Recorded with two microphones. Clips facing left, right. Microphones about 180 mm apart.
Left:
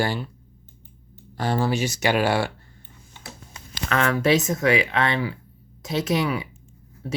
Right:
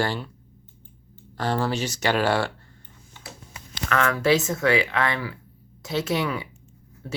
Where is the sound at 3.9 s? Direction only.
25° left (ahead or behind).